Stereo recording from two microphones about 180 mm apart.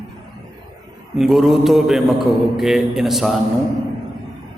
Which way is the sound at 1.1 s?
Centre (ahead or behind).